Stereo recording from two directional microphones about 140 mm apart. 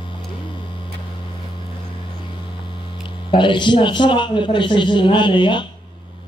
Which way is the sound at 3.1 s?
35° left (ahead or behind).